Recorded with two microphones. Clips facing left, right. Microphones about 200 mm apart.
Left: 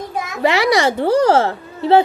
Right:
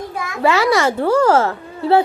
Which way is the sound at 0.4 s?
15° left (ahead or behind).